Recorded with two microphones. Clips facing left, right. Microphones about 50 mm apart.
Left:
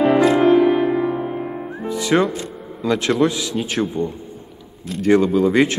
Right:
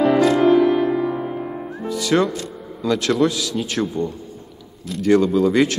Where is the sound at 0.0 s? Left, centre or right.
Centre.